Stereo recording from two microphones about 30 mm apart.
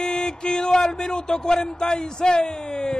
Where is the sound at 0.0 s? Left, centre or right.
Left.